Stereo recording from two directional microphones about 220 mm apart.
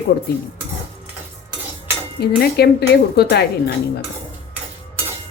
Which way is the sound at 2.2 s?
45° left (ahead or behind).